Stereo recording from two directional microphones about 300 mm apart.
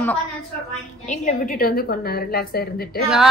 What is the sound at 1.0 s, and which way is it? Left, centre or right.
A woman's voice, left.